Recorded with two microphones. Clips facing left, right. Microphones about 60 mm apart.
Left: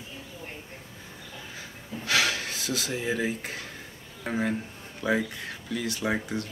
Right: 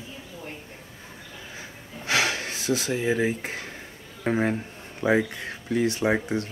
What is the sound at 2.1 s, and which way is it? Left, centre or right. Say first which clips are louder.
Speech: right 1 dB; right.